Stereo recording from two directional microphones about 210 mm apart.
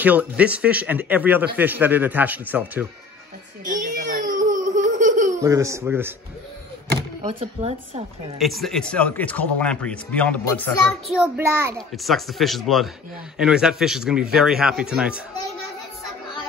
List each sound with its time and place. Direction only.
0.0 s a man's voice: 5° right (ahead or behind)
3.6 s baby laughter: 40° right (ahead or behind)
5.4 s a man's voice: 15° right (ahead or behind)
7.3 s speech: 30° right (ahead or behind)
8.4 s a man's voice: centre (ahead or behind)
11.1 s a man's voice: 10° right (ahead or behind)
11.9 s a man's voice: centre (ahead or behind)